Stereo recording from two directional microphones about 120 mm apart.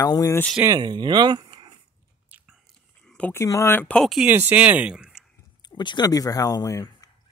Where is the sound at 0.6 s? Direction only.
35° right (ahead or behind).